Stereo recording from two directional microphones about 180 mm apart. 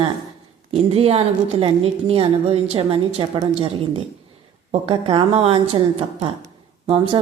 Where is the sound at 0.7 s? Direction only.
35° right (ahead or behind).